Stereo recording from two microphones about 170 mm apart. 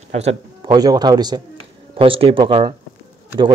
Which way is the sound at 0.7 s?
25° right (ahead or behind).